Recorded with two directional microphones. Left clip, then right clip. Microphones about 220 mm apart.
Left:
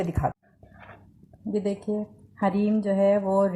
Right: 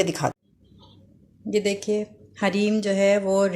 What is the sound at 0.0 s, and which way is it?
Speech, 50° right (ahead or behind).